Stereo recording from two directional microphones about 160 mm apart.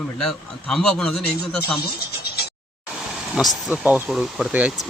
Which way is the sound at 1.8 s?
75° left (ahead or behind).